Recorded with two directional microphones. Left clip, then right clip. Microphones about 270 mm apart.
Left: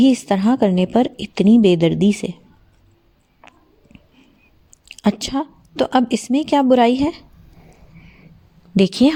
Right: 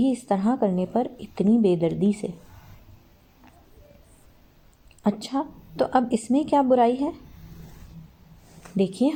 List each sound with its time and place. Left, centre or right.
0.0 s a woman's voice: left
3.4 s a sound: left
4.9 s a woman's voice: left
8.7 s speech: left